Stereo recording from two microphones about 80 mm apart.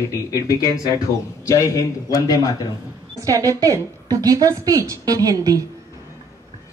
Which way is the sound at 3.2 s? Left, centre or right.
Right.